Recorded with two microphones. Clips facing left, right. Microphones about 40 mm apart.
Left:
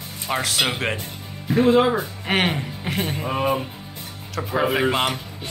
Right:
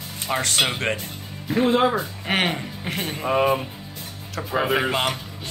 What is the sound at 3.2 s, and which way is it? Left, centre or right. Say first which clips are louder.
Speech: right 7 dB; centre.